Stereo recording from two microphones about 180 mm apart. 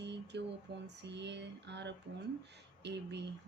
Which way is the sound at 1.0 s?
75° right (ahead or behind).